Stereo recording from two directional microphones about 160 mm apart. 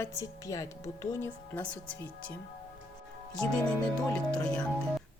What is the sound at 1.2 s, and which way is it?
Speech, 10° left (ahead or behind).